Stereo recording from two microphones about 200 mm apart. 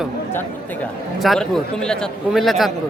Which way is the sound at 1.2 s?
Centre (ahead or behind).